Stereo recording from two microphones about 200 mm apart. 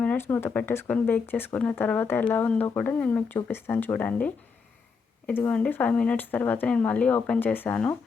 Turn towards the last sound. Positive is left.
turn(degrees=10)  # may be behind; listen again after turning